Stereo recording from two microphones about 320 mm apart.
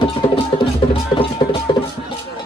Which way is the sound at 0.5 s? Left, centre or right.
Centre.